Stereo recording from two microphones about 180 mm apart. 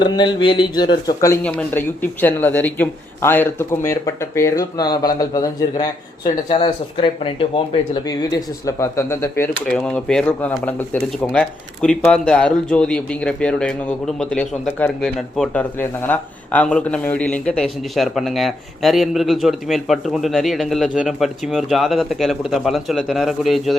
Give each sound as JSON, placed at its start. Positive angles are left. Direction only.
{"t": 0.0, "sound": "speech", "side_deg": 25}
{"t": 1.5, "sound": "speech", "side_deg": 10}